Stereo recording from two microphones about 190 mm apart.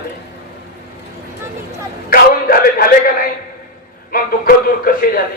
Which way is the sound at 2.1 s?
50° left (ahead or behind).